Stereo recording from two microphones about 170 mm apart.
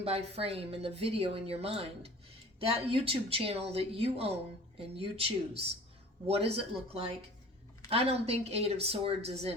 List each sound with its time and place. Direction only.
0.0 s speech: 35° right (ahead or behind)